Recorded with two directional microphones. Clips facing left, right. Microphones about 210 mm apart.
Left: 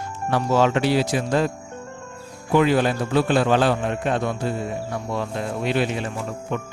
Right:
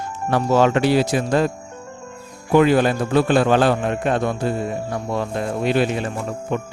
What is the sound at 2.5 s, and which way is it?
A man's voice, 50° right (ahead or behind).